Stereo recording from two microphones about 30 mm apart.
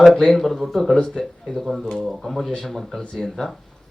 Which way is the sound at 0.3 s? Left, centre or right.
Centre.